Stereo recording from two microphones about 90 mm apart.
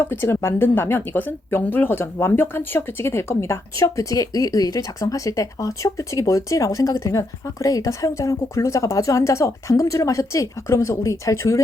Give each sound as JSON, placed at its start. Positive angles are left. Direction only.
{"t": 0.1, "sound": "speech", "side_deg": 25}